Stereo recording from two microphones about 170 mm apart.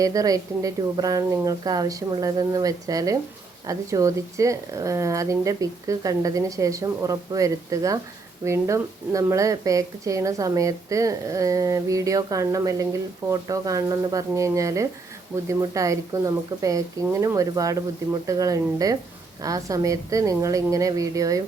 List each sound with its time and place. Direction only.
0.0 s speech: 20° right (ahead or behind)